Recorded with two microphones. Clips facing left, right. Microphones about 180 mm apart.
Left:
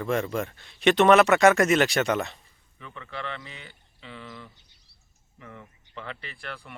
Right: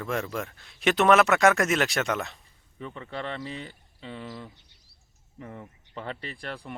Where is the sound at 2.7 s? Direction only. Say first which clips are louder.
Right 3 dB; 35° right (ahead or behind).